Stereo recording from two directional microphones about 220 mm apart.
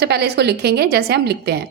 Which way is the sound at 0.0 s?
50° right (ahead or behind).